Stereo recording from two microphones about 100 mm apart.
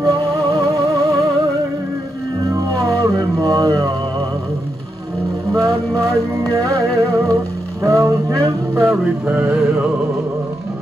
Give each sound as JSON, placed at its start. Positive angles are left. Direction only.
{"t": 0.0, "sound": "music", "side_deg": -35}
{"t": 2.5, "sound": "music", "side_deg": -35}
{"t": 5.5, "sound": "music", "side_deg": -30}
{"t": 9.2, "sound": "a sound", "side_deg": -15}